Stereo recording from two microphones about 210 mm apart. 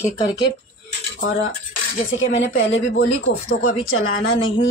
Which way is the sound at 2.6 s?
65° left (ahead or behind).